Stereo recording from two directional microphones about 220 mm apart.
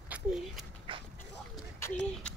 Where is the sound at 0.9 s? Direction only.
25° right (ahead or behind).